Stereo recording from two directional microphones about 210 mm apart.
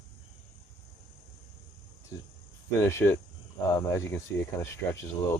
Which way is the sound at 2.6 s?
10° left (ahead or behind).